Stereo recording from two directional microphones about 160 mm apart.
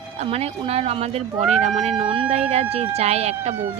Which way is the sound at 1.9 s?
35° right (ahead or behind).